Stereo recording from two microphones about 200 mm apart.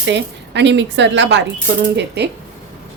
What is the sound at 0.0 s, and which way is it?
A woman's voice, 60° right (ahead or behind).